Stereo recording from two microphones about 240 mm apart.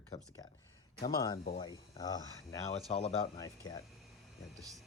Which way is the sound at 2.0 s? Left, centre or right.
Centre.